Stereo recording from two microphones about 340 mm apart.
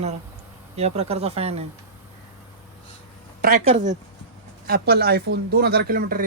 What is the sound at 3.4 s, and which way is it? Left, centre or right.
Speech, centre.